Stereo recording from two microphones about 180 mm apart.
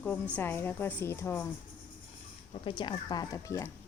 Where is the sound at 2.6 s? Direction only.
25° left (ahead or behind).